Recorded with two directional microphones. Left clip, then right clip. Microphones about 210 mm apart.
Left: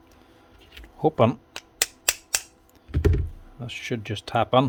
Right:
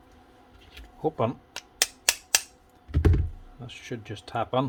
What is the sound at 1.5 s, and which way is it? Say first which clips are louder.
Finger snapping: even; 10° left (ahead or behind).